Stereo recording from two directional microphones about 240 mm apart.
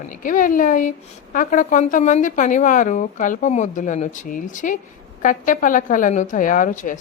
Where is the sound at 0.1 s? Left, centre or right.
Left.